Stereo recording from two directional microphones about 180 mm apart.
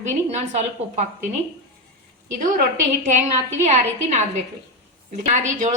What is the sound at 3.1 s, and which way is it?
A woman's voice, 35° right (ahead or behind).